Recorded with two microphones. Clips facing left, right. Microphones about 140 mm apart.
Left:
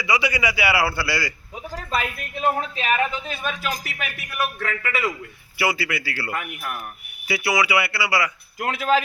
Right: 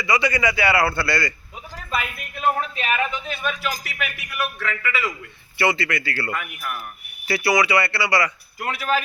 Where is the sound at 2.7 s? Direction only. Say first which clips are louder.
Left 1 dB; 30° left (ahead or behind).